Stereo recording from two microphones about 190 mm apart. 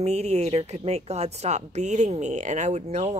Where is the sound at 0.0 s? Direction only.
35° right (ahead or behind).